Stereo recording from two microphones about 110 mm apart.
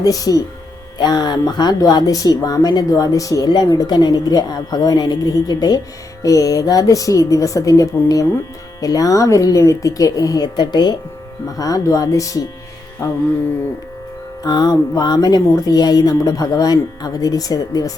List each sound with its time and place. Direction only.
0.0 s speech: 35° left (ahead or behind)
14.4 s speech: 35° left (ahead or behind)